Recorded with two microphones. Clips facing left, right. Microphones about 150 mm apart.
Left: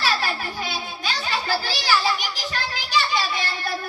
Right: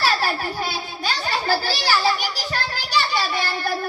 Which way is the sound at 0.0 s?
45° right (ahead or behind).